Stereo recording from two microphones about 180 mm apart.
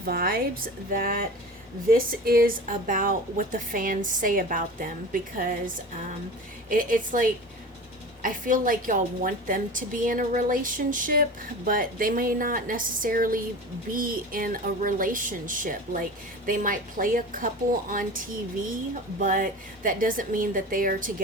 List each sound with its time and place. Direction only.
0.0 s a woman's voice: 55° right (ahead or behind)